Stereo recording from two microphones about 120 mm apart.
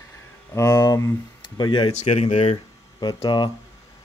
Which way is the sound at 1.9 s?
65° left (ahead or behind).